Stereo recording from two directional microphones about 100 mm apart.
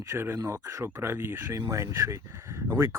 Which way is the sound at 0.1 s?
25° right (ahead or behind).